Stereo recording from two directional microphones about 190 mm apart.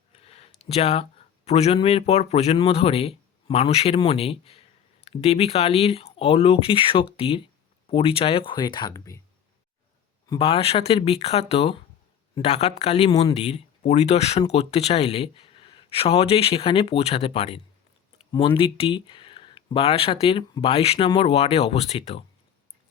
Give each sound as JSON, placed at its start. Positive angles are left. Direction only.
{"t": 0.1, "sound": "a sound", "side_deg": 30}
{"t": 0.7, "sound": "speech", "side_deg": 30}
{"t": 10.2, "sound": "speech", "side_deg": 30}